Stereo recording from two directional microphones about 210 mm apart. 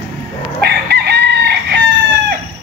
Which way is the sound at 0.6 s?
50° right (ahead or behind).